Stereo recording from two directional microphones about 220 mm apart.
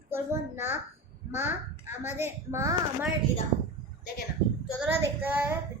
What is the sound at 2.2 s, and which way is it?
Speech, 10° right (ahead or behind).